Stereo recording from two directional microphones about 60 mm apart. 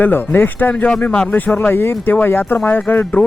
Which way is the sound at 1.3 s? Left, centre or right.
Left.